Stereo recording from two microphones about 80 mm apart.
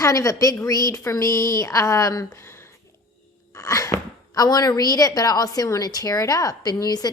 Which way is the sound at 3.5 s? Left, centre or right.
Left.